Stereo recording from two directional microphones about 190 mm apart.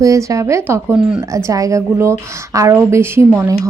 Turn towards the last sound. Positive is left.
turn(degrees=-10)  # may be behind; listen again after turning